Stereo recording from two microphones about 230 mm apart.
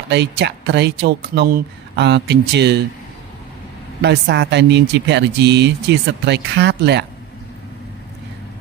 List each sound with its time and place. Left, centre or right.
0.1 s speech: right
4.0 s speech: right